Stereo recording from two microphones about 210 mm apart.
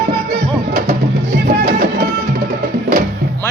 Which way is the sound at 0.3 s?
50° right (ahead or behind).